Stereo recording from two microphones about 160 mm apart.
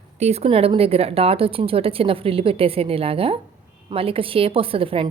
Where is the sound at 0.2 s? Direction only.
40° right (ahead or behind).